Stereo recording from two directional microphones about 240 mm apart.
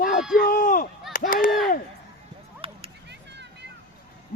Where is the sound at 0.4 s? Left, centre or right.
Left.